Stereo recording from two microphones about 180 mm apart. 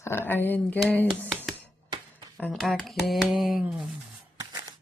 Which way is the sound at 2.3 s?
Centre (ahead or behind).